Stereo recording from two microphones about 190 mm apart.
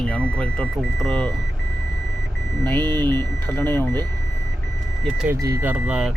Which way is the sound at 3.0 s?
10° left (ahead or behind).